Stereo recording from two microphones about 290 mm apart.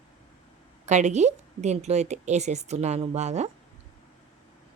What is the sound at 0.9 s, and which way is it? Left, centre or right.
A woman's voice, right.